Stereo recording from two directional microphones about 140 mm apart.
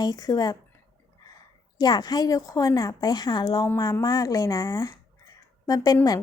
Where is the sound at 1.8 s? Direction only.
30° left (ahead or behind).